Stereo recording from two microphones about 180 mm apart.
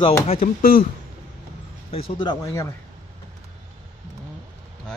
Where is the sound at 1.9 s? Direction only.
30° left (ahead or behind).